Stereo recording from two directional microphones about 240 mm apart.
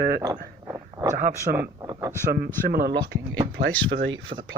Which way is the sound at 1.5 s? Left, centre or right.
Centre.